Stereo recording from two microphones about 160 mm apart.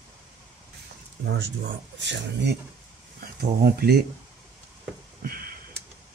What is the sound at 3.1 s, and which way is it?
Speech, 75° right (ahead or behind).